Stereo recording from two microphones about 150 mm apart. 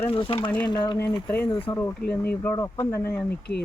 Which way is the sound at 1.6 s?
10° left (ahead or behind).